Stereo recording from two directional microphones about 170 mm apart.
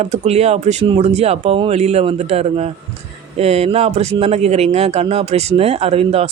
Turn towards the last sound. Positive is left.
turn(degrees=-40)  # may be behind; listen again after turning